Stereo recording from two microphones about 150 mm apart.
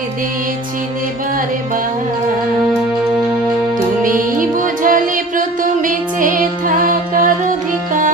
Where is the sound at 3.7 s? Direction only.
65° right (ahead or behind).